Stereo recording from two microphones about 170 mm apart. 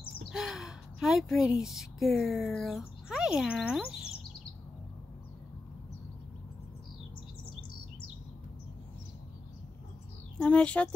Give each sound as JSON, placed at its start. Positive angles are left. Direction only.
{"t": 0.3, "sound": "speech", "side_deg": -5}
{"t": 10.4, "sound": "speech", "side_deg": 5}